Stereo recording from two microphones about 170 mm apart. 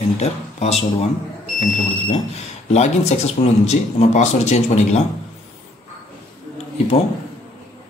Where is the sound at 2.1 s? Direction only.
40° left (ahead or behind).